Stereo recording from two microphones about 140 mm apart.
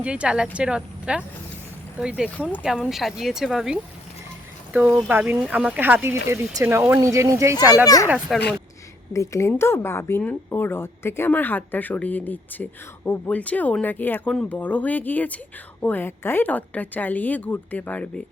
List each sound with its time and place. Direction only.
0.0 s speech: 10° right (ahead or behind)
8.3 s speech: centre (ahead or behind)
9.1 s speech: 20° left (ahead or behind)